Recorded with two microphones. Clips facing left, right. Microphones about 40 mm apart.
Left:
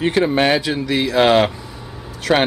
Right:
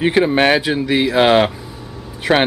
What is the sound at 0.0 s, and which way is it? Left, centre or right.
Speech, centre.